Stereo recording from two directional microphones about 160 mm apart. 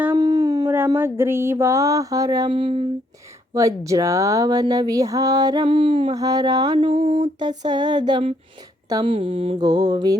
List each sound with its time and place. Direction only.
0.0 s howl: 20° right (ahead or behind)
0.9 s speech: 15° right (ahead or behind); by 2.8 s 35° right (ahead or behind)
3.5 s speech: 20° right (ahead or behind)
6.1 s speech: 25° right (ahead or behind)
6.7 s speech: 35° right (ahead or behind)